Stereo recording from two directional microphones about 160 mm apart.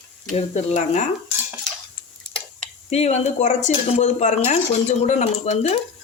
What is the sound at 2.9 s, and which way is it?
Speech, 45° left (ahead or behind).